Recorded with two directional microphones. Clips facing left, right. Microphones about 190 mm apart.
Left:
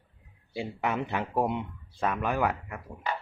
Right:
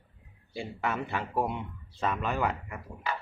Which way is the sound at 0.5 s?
15° left (ahead or behind).